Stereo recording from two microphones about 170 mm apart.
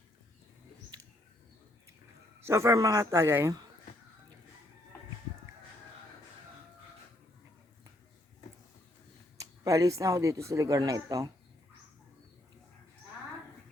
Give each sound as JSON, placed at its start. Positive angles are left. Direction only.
{"t": 2.4, "sound": "a man's voice", "side_deg": -15}
{"t": 9.4, "sound": "speech", "side_deg": -20}